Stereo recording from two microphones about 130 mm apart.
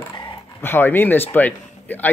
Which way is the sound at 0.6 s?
15° left (ahead or behind).